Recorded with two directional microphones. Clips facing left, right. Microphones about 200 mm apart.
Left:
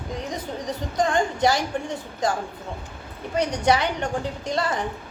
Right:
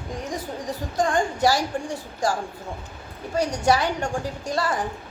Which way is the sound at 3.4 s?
20° left (ahead or behind).